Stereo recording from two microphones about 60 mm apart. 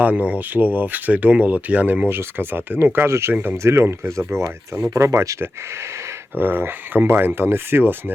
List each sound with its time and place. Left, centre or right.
0.0 s speech: right
2.0 s speech: right
6.3 s speech: right